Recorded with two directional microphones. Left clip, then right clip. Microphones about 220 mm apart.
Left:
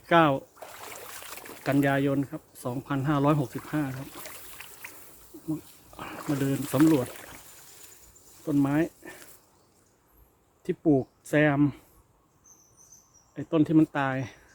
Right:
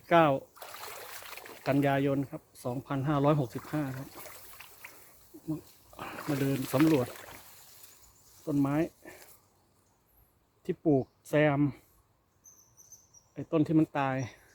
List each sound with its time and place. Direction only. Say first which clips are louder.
0.0 s speech: left 2 dB; 10° right (ahead or behind)
0.9 s boat: left 2 dB; 5° right (ahead or behind)
1.6 s speech: left 3 dB; 15° right (ahead or behind)
4.0 s a sound: left 5 dB; centre (ahead or behind)
6.0 s speech: left 2 dB; 15° right (ahead or behind)
8.4 s speech: left 4 dB; 10° right (ahead or behind)
10.6 s speech: left 3 dB; 15° right (ahead or behind)
13.3 s speech: left 4 dB; 15° right (ahead or behind)